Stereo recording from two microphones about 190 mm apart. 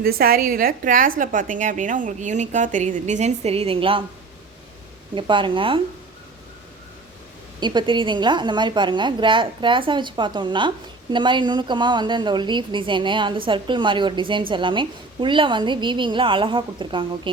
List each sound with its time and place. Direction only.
0.0 s a woman's voice: 55° right (ahead or behind); by 4.0 s 30° right (ahead or behind)
5.1 s a woman's voice: 25° right (ahead or behind)
7.6 s a woman's voice: 25° right (ahead or behind)